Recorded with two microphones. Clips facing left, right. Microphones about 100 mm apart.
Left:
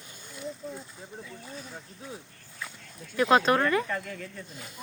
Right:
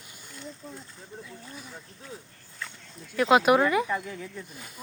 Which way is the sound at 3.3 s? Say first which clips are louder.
Right 3 dB; 10° right (ahead or behind).